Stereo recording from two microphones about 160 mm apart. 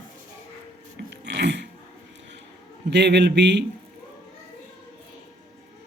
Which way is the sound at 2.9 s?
90° right.